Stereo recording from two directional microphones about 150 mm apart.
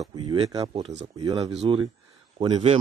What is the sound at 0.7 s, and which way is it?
Speech, 45° right (ahead or behind).